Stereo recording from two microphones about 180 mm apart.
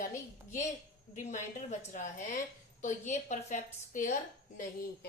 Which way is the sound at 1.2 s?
40° left (ahead or behind).